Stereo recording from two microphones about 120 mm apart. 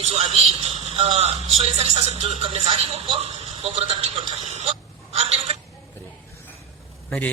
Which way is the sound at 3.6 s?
55° right (ahead or behind).